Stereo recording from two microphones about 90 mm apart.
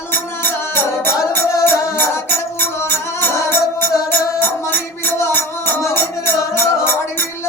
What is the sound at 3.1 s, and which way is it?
Music, 25° left (ahead or behind).